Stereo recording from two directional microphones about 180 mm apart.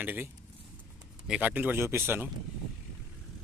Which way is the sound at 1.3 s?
10° right (ahead or behind).